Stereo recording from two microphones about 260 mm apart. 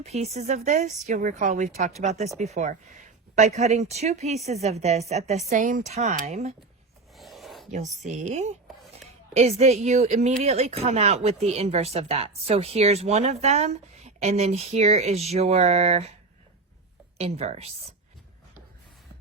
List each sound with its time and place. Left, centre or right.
0.0 s speech: right
7.2 s rub: centre
7.7 s speech: right
8.6 s a sound: centre
9.3 s speech: right
17.2 s speech: right